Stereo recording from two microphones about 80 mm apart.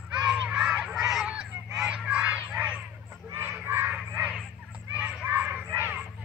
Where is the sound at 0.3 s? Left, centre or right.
Centre.